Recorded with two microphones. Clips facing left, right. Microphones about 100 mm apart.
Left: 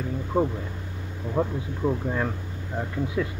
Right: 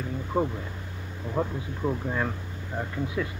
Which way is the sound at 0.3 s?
20° left (ahead or behind).